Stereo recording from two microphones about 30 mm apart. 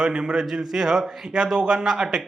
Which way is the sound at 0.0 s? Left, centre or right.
Right.